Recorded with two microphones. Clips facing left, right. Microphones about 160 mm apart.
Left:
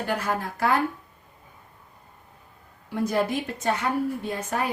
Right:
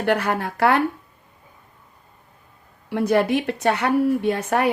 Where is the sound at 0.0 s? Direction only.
70° right (ahead or behind).